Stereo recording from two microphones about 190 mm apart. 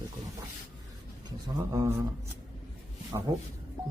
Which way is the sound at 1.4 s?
15° right (ahead or behind).